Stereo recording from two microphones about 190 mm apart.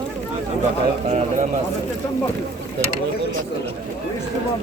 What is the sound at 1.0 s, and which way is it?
Speech, 35° right (ahead or behind).